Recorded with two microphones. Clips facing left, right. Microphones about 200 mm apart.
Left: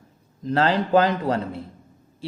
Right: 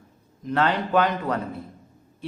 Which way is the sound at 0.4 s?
30° left (ahead or behind).